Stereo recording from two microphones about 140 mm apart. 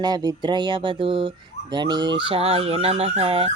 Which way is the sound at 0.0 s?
30° right (ahead or behind).